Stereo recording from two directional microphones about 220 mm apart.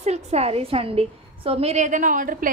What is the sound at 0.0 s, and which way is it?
A woman's voice, 30° right (ahead or behind).